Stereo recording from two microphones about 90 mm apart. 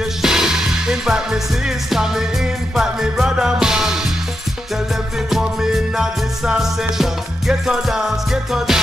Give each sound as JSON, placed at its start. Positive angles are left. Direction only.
{"t": 0.2, "sound": "music", "side_deg": -5}
{"t": 5.3, "sound": "music", "side_deg": -5}